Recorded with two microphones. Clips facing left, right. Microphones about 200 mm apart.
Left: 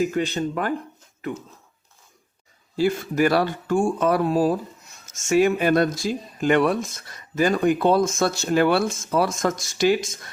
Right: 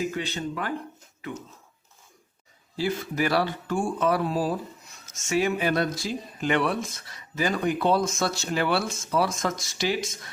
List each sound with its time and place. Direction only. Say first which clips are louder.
0.0 s speech: left 7 dB; 45° left (ahead or behind)
2.7 s speech: left 6 dB; 50° left (ahead or behind)